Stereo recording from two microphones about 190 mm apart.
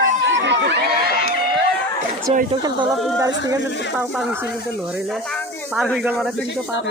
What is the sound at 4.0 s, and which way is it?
Speech, 10° right (ahead or behind).